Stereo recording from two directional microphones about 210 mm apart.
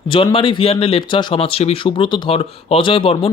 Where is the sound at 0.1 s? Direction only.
25° left (ahead or behind).